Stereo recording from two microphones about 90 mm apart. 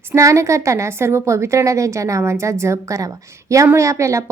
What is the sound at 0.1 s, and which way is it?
A woman's voice, 35° right (ahead or behind).